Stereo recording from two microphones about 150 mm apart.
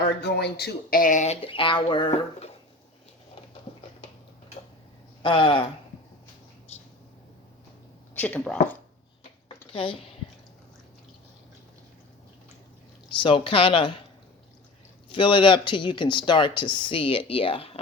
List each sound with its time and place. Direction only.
0.2 s speech: 90° left; by 1.4 s 55° left (ahead or behind)
1.4 s speech: 35° left (ahead or behind)
5.2 s speech: 35° left (ahead or behind)
8.1 s speech: 10° left (ahead or behind)
9.7 s speech: 35° left (ahead or behind)
13.1 s speech: 35° left (ahead or behind)
15.1 s speech: 35° left (ahead or behind)